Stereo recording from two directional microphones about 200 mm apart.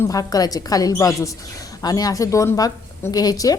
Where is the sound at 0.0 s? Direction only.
15° left (ahead or behind).